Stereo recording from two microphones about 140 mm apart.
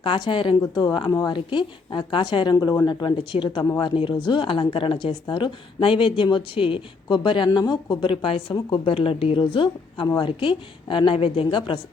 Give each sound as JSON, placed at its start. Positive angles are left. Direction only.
{"t": 0.0, "sound": "speech", "side_deg": 35}